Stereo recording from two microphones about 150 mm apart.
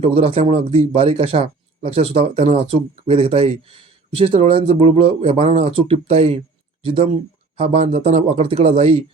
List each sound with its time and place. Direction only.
0.0 s speech: 40° right (ahead or behind)